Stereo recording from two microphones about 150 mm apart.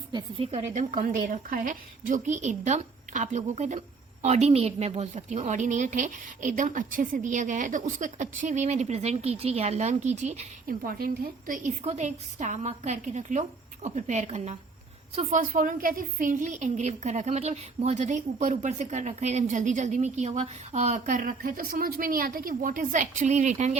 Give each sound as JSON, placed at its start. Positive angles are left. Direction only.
{"t": 0.1, "sound": "speech", "side_deg": -35}
{"t": 0.7, "sound": "a woman's voice", "side_deg": -55}
{"t": 10.7, "sound": "a woman's voice", "side_deg": -75}
{"t": 11.8, "sound": "a woman's voice", "side_deg": -50}
{"t": 15.4, "sound": "a woman's voice", "side_deg": -70}